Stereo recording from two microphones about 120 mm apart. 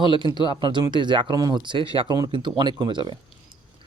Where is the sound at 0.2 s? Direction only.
40° right (ahead or behind).